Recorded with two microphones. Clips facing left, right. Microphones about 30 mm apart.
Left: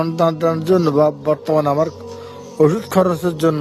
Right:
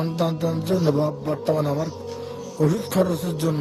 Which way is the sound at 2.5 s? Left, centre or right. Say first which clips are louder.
Left 7 dB; left.